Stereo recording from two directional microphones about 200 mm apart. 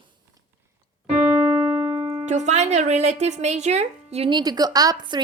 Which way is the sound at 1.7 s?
15° right (ahead or behind).